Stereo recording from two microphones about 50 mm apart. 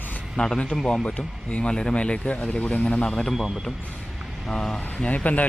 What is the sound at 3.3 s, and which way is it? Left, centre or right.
Speech, centre.